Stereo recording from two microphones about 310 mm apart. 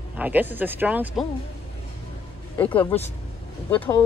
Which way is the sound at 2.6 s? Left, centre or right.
Centre.